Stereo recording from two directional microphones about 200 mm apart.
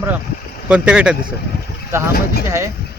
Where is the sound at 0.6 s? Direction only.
5° right (ahead or behind).